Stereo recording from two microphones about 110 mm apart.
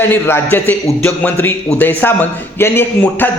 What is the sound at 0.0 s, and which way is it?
A man's voice, 20° left (ahead or behind).